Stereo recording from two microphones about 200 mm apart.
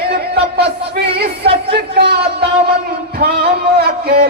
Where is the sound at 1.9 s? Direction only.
55° right (ahead or behind).